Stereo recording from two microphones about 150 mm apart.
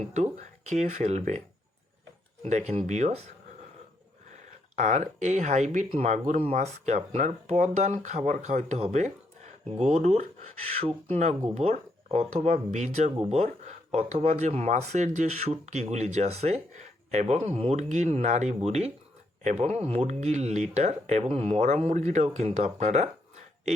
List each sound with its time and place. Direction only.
0.0 s speech: 45° right (ahead or behind)
2.4 s speech: 50° right (ahead or behind)
4.7 s speech: 50° right (ahead or behind)